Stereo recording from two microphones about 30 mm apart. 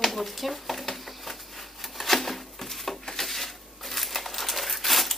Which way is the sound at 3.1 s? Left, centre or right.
Centre.